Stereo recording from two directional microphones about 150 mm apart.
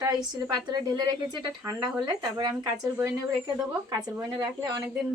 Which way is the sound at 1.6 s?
10° right (ahead or behind).